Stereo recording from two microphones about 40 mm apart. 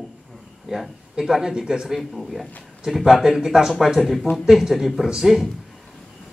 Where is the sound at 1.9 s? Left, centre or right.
Centre.